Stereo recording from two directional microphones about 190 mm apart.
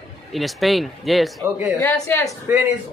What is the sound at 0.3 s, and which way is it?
A man's voice, centre (ahead or behind).